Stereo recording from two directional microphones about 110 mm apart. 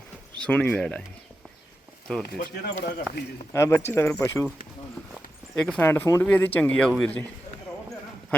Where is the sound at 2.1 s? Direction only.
5° left (ahead or behind).